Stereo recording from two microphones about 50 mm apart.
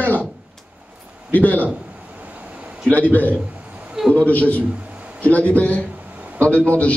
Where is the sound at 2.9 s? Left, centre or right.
Left.